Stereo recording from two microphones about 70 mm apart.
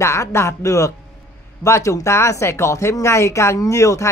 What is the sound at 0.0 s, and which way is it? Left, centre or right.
Speech, left.